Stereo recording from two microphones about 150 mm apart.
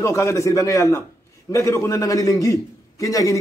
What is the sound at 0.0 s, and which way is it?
A man's voice, 20° left (ahead or behind).